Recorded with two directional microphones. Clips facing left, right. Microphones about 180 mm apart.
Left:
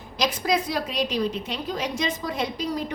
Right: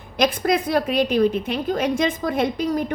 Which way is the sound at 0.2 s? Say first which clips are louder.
Right 5 dB; 55° right (ahead or behind).